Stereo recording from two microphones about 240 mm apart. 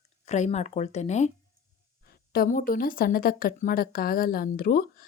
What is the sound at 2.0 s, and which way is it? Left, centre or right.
Speech, left.